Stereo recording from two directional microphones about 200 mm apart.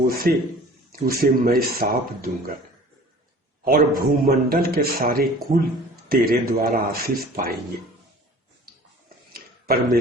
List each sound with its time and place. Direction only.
0.0 s a man's voice: 50° right (ahead or behind)
3.6 s a man's voice: 45° right (ahead or behind)
9.3 s a sound: 50° right (ahead or behind)